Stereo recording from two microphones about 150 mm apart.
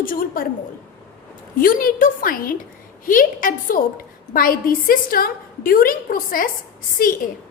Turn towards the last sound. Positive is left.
turn(degrees=75)  # may be behind; listen again after turning